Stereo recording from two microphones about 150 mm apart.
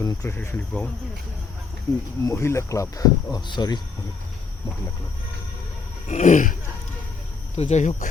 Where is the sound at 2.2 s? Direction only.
20° left (ahead or behind).